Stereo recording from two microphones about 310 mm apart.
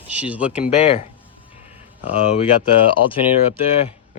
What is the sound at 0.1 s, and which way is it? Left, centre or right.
Speech, centre.